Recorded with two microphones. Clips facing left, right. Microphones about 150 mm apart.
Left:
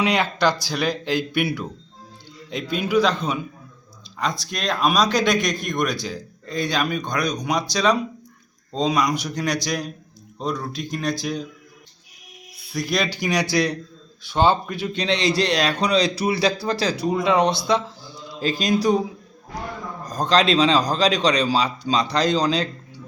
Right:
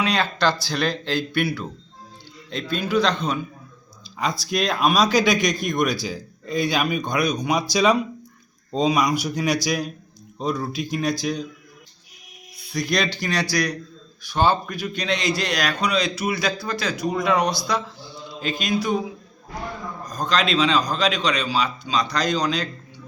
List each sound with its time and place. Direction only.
0.0 s speech: 20° left (ahead or behind)
4.2 s a man's voice: 5° right (ahead or behind)
12.5 s a man's voice: 5° left (ahead or behind); by 19.0 s 35° left (ahead or behind)
20.1 s a man's voice: 35° left (ahead or behind)